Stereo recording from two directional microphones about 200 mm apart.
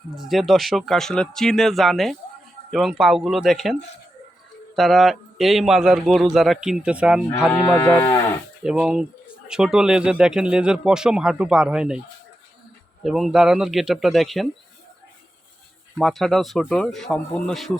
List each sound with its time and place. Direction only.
0.2 s a man's voice: centre (ahead or behind)
7.5 s speech: 20° left (ahead or behind)
8.6 s a man's voice: 5° right (ahead or behind)
13.0 s a man's voice: centre (ahead or behind)
16.0 s a man's voice: centre (ahead or behind)